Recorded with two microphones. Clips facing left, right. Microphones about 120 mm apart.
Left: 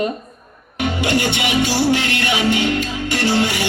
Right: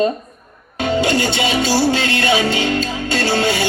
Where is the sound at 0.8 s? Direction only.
20° left (ahead or behind).